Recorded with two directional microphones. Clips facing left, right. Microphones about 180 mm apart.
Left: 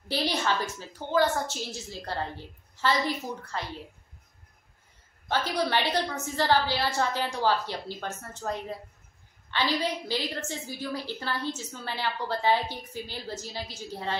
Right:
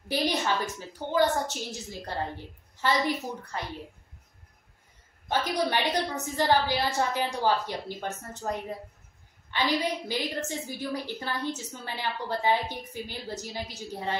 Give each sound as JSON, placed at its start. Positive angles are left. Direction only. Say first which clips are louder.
{"t": 0.1, "sound": "a woman's voice", "louder": "right 1 dB", "side_deg": -15}
{"t": 2.7, "sound": "a sound", "louder": "even", "side_deg": -15}
{"t": 3.5, "sound": "a woman's voice", "louder": "left 1 dB", "side_deg": -15}
{"t": 5.3, "sound": "a woman's voice", "louder": "even", "side_deg": -15}